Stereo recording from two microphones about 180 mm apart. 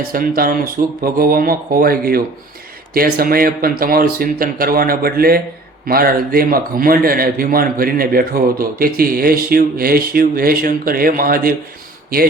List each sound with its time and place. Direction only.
0.1 s a man's voice: 55° right (ahead or behind)